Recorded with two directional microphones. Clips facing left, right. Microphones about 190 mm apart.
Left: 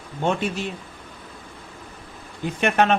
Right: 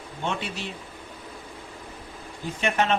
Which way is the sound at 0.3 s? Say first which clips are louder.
Left 7 dB; 50° left (ahead or behind).